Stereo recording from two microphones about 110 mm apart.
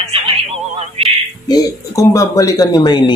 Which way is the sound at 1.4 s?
35° left (ahead or behind).